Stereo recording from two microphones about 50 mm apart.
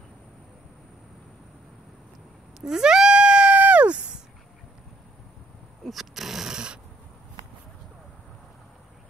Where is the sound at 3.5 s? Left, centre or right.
Right.